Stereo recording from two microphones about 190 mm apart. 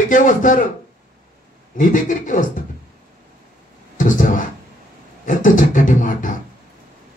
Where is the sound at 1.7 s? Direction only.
45° left (ahead or behind).